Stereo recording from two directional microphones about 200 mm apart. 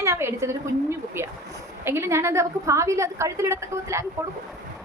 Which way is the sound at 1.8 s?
10° right (ahead or behind).